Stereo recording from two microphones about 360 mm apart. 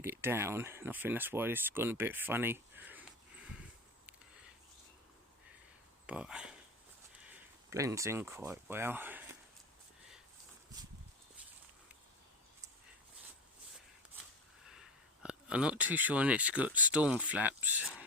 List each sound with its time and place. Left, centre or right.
0.0 s speech: centre
6.1 s speech: centre
14.7 s speech: centre